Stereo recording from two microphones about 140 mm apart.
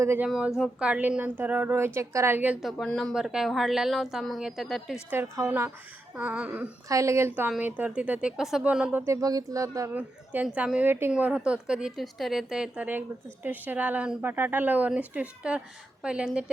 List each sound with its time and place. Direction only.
0.0 s a woman's voice: 15° right (ahead or behind)
0.3 s a woman's voice: 5° right (ahead or behind)
2.6 s a woman's voice: centre (ahead or behind)
5.1 s a woman's voice: 15° right (ahead or behind)
6.8 s a woman's voice: 25° right (ahead or behind)
9.2 s speech: 25° right (ahead or behind)
9.9 s a woman's voice: 10° right (ahead or behind)